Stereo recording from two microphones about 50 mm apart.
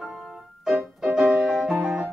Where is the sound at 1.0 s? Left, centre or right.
Centre.